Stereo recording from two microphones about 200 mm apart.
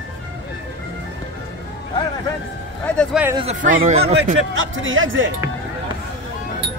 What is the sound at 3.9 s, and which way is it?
Speech, 30° right (ahead or behind).